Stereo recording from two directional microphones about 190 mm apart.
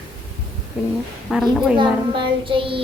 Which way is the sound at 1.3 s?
Centre (ahead or behind).